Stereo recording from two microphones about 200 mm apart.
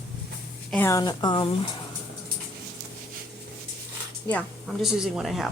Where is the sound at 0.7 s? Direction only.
15° left (ahead or behind).